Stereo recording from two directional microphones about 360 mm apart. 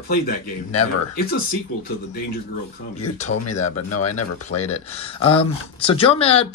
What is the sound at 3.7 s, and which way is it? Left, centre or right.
Speech, left.